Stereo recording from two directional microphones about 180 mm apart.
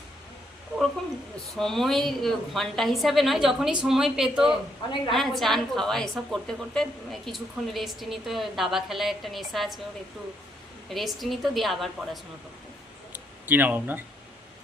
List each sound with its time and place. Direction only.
1.5 s a woman's voice: centre (ahead or behind)
10.8 s a woman's voice: centre (ahead or behind)